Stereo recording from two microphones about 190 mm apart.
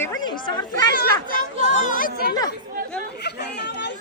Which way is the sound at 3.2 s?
60° left (ahead or behind).